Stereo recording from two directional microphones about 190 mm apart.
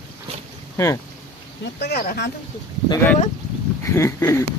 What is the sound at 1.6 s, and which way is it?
Speech, 60° left (ahead or behind).